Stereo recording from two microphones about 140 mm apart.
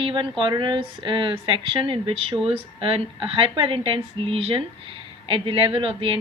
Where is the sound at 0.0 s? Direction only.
35° right (ahead or behind).